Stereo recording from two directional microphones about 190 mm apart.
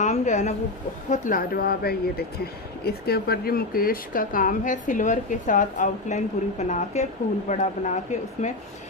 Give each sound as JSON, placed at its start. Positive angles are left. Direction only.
{"t": 0.0, "sound": "a woman's voice", "side_deg": 40}